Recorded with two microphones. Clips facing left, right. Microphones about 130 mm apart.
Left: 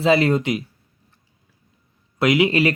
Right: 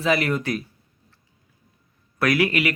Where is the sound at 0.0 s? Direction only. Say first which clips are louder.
Left 5 dB; 25° left (ahead or behind).